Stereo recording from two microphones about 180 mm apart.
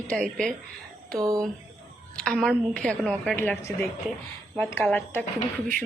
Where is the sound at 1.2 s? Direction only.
20° right (ahead or behind).